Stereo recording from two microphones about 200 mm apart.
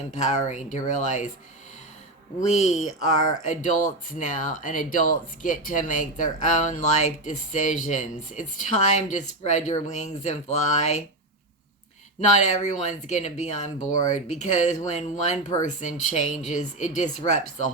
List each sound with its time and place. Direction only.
0.1 s speech: 35° left (ahead or behind)
2.4 s speech: 35° left (ahead or behind)
12.6 s speech: 35° left (ahead or behind)